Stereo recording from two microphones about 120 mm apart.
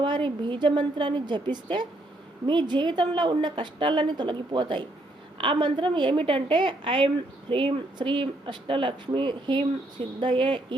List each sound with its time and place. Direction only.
0.0 s a woman's voice: 40° right (ahead or behind)